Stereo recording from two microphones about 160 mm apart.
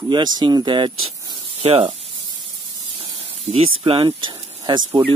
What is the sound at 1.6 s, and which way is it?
Speech, 40° right (ahead or behind).